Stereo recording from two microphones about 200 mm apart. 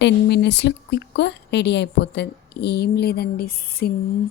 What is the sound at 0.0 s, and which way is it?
A woman's voice, 60° left (ahead or behind).